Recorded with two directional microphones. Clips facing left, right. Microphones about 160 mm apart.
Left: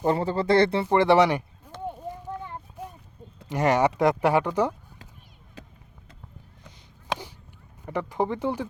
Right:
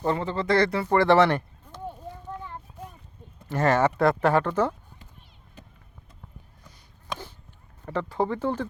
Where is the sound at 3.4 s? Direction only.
15° left (ahead or behind).